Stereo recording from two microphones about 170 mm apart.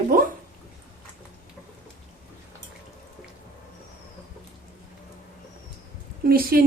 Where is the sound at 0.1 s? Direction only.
60° right (ahead or behind).